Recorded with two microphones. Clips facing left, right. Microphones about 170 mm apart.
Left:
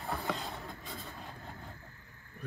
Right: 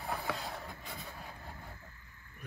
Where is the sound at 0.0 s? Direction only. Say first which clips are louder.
Left 1 dB; centre (ahead or behind).